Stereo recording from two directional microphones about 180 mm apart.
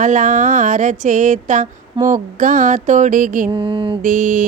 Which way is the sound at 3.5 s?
30° right (ahead or behind).